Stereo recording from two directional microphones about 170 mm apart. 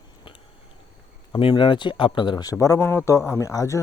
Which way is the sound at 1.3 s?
30° left (ahead or behind).